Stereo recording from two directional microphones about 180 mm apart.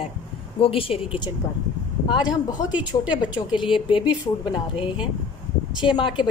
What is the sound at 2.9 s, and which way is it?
A woman's voice, 30° left (ahead or behind).